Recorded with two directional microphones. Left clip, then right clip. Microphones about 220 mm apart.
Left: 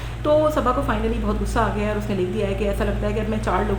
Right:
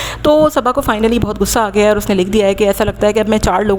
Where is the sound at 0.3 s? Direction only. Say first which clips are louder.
Right 7 dB; 50° right (ahead or behind).